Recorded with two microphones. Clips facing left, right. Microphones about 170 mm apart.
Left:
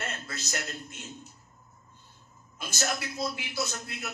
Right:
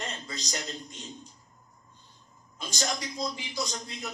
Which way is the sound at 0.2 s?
15° right (ahead or behind).